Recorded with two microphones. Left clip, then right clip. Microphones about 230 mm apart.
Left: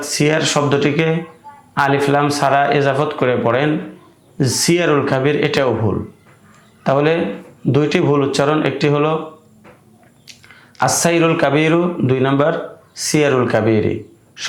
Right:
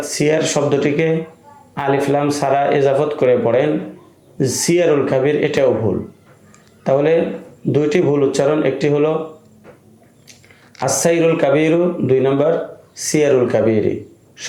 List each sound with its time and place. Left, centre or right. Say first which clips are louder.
0.0 s speech: even; left
6.8 s speech: right 1 dB; left
10.8 s speech: left 1 dB; left